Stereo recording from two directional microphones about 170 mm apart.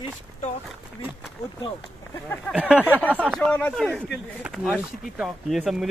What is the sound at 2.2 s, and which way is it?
Speech, 10° left (ahead or behind).